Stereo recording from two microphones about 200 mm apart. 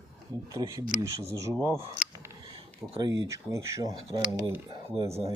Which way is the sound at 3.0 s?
15° right (ahead or behind).